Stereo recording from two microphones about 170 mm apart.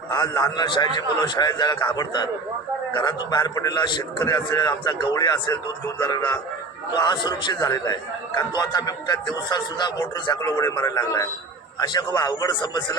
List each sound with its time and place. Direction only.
0.1 s a man's voice: 25° left (ahead or behind)